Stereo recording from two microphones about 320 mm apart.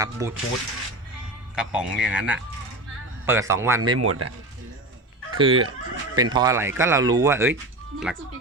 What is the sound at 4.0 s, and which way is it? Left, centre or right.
Speech, right.